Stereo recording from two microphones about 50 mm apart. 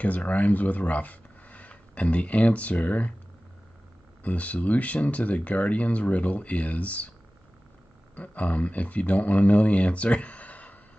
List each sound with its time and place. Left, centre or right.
0.0 s speech: left
4.2 s speech: left
8.2 s speech: left